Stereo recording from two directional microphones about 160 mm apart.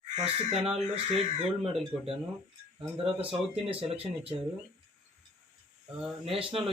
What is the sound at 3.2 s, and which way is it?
Speech, 35° right (ahead or behind).